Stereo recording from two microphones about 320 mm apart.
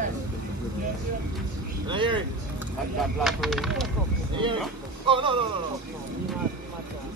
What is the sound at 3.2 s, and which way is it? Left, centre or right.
Speech, centre.